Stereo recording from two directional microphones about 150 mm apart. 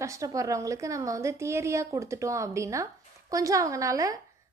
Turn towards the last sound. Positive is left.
turn(degrees=-20)  # may be behind; listen again after turning